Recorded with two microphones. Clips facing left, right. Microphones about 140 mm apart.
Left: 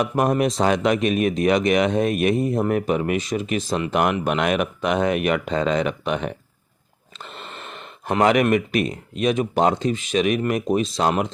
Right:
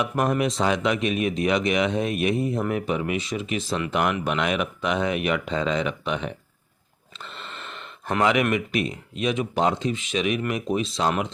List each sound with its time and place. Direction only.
0.0 s speech: 40° left (ahead or behind)
7.2 s a sound: 45° left (ahead or behind)
8.2 s speech: 45° left (ahead or behind)